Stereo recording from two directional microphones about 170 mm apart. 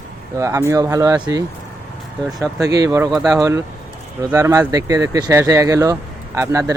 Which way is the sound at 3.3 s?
20° right (ahead or behind).